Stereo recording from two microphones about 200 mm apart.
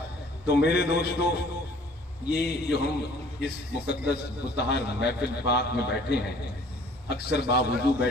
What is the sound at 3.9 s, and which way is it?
A man's voice, 55° left (ahead or behind).